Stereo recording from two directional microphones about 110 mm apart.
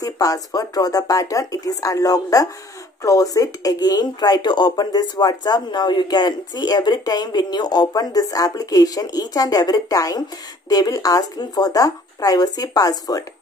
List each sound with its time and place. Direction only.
0.0 s speech: 30° left (ahead or behind)